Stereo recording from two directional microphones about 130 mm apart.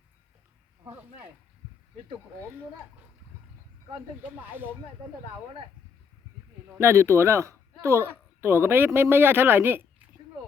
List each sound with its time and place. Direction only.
4.2 s speech: 15° right (ahead or behind)
6.7 s a man's voice: 20° right (ahead or behind)